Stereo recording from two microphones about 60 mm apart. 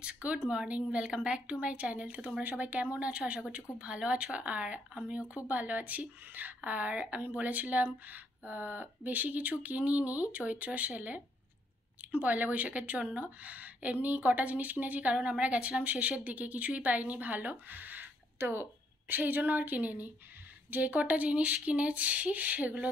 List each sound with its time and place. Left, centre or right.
0.0 s speech: right